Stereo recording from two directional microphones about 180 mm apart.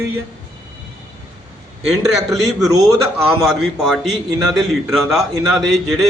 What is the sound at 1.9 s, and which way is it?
Speech, centre (ahead or behind).